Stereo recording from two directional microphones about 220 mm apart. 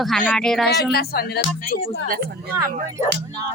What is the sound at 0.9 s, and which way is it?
Speech, 45° left (ahead or behind).